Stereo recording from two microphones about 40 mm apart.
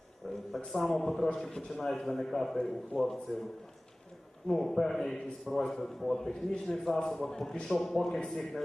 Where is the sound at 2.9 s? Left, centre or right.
Centre.